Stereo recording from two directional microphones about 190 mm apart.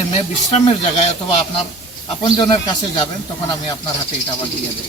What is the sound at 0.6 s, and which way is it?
Speech, 30° left (ahead or behind).